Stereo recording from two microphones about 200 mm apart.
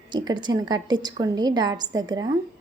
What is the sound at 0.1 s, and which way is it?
A woman's voice, 20° right (ahead or behind).